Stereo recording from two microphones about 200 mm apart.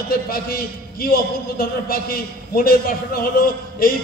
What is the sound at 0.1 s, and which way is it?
A man's voice, 50° left (ahead or behind).